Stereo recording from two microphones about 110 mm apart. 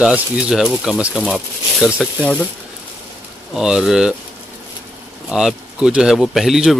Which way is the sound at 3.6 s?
5° right (ahead or behind).